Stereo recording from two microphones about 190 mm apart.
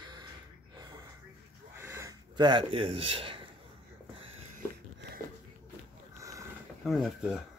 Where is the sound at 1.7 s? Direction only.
15° right (ahead or behind); by 3.4 s 30° right (ahead or behind).